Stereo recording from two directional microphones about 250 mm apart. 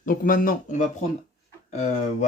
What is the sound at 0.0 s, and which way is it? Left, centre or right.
Speech, left.